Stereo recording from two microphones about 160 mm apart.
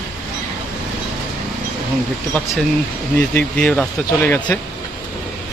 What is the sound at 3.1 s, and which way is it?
Speech, 10° left (ahead or behind).